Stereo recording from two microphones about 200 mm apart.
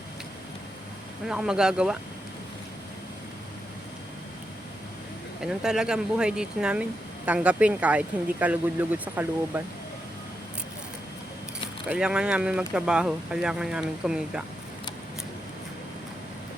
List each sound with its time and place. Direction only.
1.3 s speech: 5° right (ahead or behind)
5.4 s speech: 5° right (ahead or behind)
11.9 s speech: 5° right (ahead or behind)